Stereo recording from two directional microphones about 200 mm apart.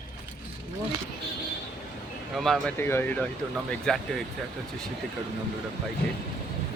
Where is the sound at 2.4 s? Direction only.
5° left (ahead or behind).